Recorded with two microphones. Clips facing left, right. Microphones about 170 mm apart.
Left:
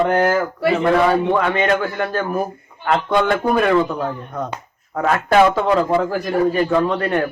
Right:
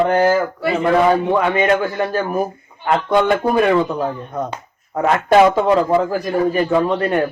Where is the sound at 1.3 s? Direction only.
15° right (ahead or behind).